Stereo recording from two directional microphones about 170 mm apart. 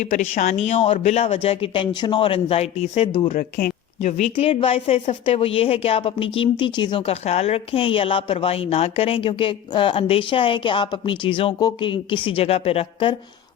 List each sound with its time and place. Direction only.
0.0 s a woman's voice: 45° left (ahead or behind)
3.2 s a woman's voice: 50° left (ahead or behind); by 13.1 s 30° left (ahead or behind)